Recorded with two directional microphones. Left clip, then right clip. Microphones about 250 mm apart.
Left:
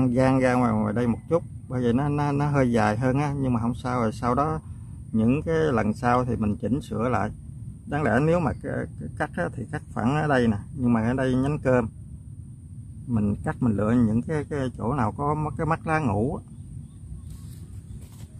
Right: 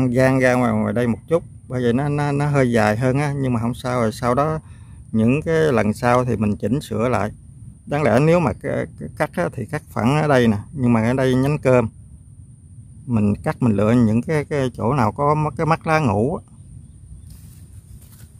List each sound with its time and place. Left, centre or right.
0.0 s speech: right
13.1 s speech: right